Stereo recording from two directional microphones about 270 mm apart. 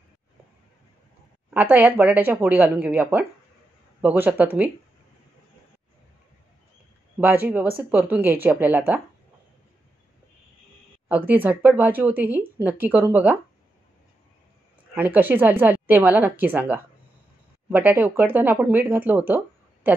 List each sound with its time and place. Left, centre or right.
1.5 s speech: centre
7.2 s speech: centre
11.1 s speech: centre
15.0 s speech: centre